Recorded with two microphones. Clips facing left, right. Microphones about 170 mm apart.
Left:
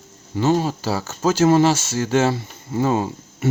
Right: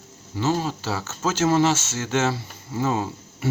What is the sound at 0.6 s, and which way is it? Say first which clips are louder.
Speech: left 4 dB; 40° left (ahead or behind).